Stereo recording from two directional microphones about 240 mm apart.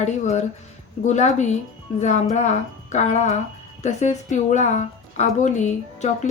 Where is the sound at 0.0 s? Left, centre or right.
Left.